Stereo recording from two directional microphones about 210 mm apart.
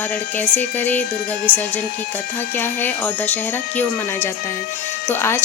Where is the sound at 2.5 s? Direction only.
10° left (ahead or behind).